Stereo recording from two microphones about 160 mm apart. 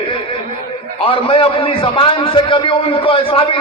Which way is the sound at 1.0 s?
35° left (ahead or behind).